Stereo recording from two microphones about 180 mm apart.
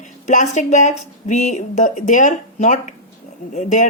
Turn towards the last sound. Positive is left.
turn(degrees=45)  # may be behind; listen again after turning